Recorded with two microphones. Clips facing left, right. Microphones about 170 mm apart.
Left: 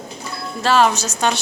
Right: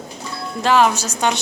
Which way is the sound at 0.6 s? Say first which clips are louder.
Even; 15° right (ahead or behind).